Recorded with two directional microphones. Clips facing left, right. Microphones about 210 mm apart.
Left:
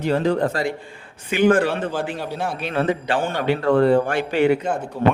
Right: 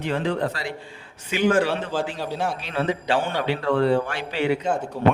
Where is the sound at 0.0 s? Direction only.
40° left (ahead or behind).